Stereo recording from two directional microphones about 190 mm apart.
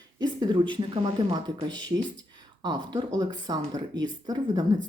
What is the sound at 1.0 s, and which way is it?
Speech, 20° right (ahead or behind).